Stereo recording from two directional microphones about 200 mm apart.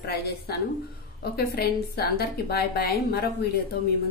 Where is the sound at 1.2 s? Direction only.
50° left (ahead or behind).